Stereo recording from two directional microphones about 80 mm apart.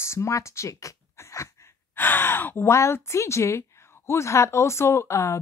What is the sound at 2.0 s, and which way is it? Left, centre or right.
Speech, left.